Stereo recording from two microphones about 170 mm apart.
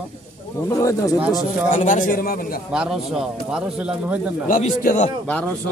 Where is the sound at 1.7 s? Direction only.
50° left (ahead or behind).